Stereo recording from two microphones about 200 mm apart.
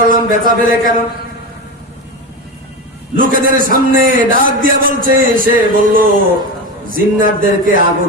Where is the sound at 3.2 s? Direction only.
45° right (ahead or behind).